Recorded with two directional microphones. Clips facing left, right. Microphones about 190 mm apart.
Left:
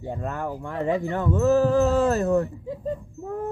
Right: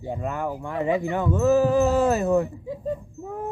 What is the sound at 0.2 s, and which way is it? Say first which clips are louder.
Wind chime: right 2 dB; 10° right (ahead or behind).